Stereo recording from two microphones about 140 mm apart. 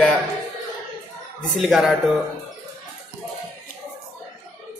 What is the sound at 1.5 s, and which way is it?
Speech, centre (ahead or behind).